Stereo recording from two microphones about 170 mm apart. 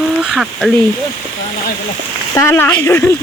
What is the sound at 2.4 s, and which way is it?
Speech, 15° left (ahead or behind).